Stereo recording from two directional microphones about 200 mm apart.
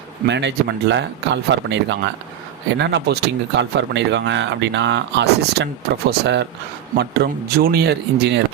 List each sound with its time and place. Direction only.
0.3 s speech: 60° right (ahead or behind)